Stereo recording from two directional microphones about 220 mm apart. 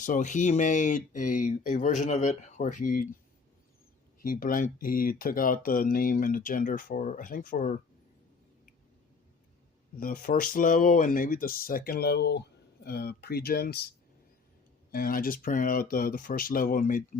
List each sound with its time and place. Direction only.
0.0 s speech: 35° left (ahead or behind)
4.2 s speech: 40° left (ahead or behind)
10.0 s speech: 40° left (ahead or behind)
14.9 s speech: 40° left (ahead or behind)